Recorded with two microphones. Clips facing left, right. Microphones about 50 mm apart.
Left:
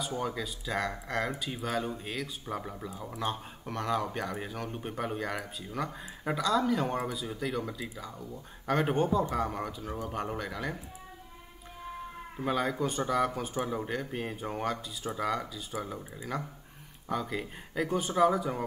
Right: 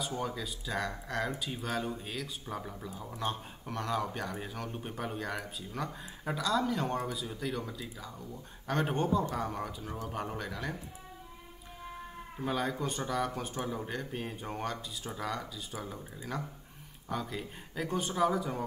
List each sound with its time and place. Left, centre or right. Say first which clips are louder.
0.0 s speech: left 2 dB; centre
2.4 s speech: left 3 dB; centre
12.4 s speech: left 3 dB; centre
13.6 s speech: left 5 dB; centre
13.8 s speech: left 3 dB; centre